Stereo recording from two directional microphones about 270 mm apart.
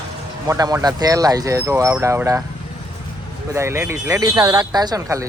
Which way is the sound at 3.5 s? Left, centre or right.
Centre.